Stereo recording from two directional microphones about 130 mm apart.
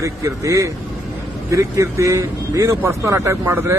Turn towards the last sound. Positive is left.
turn(degrees=-20)  # may be behind; listen again after turning